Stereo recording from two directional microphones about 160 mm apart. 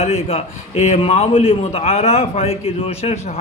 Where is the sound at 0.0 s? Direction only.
40° left (ahead or behind).